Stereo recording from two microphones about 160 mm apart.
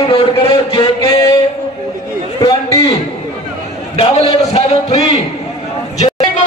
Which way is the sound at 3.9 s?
40° left (ahead or behind).